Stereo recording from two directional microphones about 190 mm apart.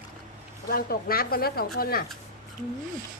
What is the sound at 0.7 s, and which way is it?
Speech, 50° left (ahead or behind).